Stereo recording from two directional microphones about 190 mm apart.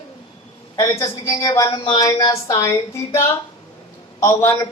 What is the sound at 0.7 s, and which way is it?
A woman's voice, 15° left (ahead or behind).